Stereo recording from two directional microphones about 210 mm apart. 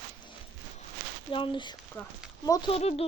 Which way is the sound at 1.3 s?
25° left (ahead or behind).